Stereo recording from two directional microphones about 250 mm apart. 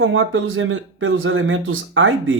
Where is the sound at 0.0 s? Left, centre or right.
Right.